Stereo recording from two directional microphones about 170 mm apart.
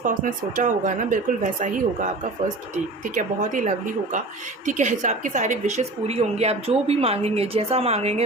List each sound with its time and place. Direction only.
0.0 s a woman's voice: 50° right (ahead or behind)